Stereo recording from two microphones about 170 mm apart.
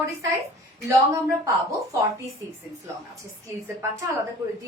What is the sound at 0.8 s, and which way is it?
Speech, 20° right (ahead or behind).